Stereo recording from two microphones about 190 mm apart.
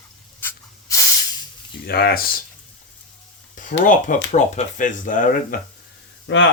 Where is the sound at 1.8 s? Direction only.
55° left (ahead or behind).